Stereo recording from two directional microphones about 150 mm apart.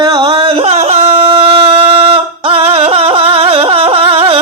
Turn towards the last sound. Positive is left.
turn(degrees=-40)  # may be behind; listen again after turning